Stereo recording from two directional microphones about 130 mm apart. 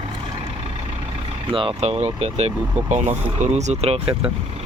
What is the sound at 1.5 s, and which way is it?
Speech, 40° right (ahead or behind).